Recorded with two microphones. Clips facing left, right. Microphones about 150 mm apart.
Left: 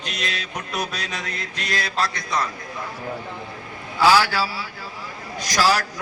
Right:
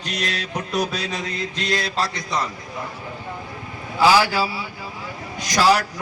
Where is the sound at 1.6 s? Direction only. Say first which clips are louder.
Right 1 dB; 25° right (ahead or behind).